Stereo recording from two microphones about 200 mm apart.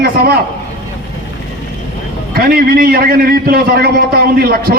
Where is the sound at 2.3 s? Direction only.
50° right (ahead or behind).